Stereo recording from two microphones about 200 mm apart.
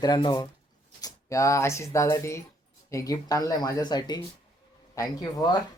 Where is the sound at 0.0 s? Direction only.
20° left (ahead or behind).